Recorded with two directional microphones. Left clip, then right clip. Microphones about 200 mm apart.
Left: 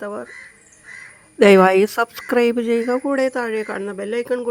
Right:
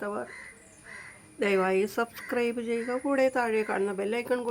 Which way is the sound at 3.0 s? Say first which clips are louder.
Left 5 dB; 25° left (ahead or behind).